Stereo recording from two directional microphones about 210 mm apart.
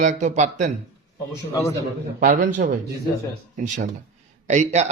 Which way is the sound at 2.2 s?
40° right (ahead or behind).